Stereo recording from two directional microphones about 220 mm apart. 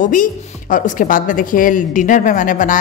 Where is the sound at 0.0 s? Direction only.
35° left (ahead or behind).